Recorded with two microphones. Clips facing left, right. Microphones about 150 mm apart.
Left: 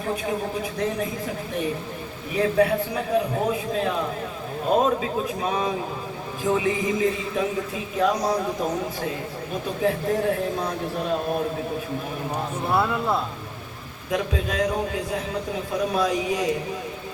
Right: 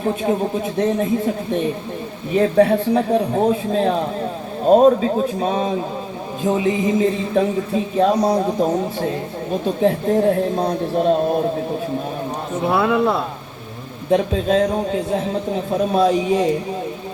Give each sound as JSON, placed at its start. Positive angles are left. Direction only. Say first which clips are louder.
{"t": 0.0, "sound": "a man's voice", "louder": "right 7 dB", "side_deg": -30}
{"t": 2.3, "sound": "a man's voice", "louder": "right 6 dB", "side_deg": -30}
{"t": 9.8, "sound": "a man's voice", "louder": "right 6 dB", "side_deg": -30}
{"t": 12.6, "sound": "speech", "louder": "right 7 dB", "side_deg": -90}
{"t": 14.1, "sound": "a man's voice", "louder": "right 9 dB", "side_deg": -30}